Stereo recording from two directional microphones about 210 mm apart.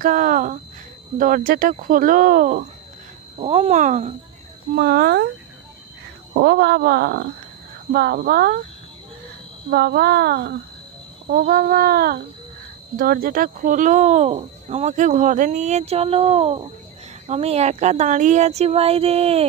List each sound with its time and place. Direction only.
0.0 s speech: 40° right (ahead or behind)
4.7 s speech: 45° right (ahead or behind)
6.3 s speech: 50° right (ahead or behind)
9.7 s speech: 50° right (ahead or behind); by 19.4 s 30° right (ahead or behind)